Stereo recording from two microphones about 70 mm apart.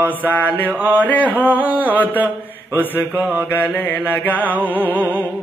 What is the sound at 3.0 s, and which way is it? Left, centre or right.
Mantra, right.